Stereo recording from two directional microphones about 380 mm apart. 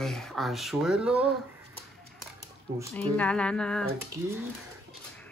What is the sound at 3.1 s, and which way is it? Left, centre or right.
Speech, centre.